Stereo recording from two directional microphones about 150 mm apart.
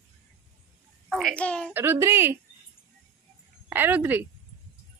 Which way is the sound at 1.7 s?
15° right (ahead or behind).